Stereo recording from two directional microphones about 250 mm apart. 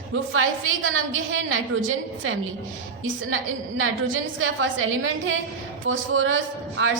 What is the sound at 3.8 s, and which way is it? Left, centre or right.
A woman's voice, right.